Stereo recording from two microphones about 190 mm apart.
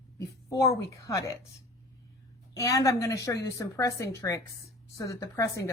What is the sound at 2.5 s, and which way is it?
A woman's voice, 15° left (ahead or behind).